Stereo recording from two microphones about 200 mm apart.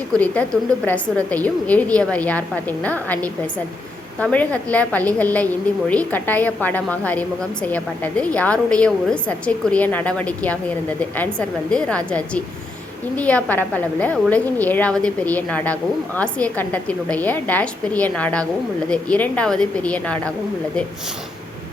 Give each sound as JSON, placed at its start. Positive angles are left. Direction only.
{"t": 0.1, "sound": "a woman's voice", "side_deg": 5}